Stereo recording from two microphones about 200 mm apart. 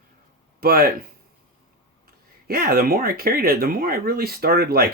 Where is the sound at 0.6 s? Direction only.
50° right (ahead or behind).